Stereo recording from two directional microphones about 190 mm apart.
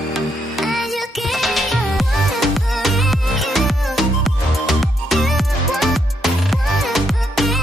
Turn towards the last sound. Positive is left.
turn(degrees=0)  # may be behind; listen again after turning